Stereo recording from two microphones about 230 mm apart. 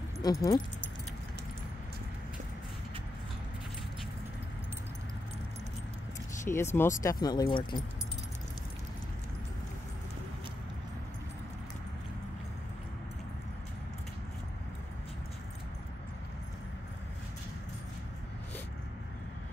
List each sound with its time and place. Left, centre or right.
0.2 s speech: centre
6.4 s speech: centre